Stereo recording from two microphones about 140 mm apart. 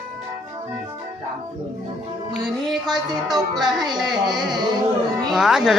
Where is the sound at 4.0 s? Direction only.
Centre (ahead or behind).